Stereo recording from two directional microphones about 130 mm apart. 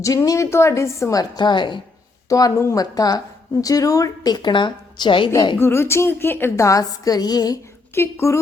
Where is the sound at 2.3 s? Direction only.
25° left (ahead or behind).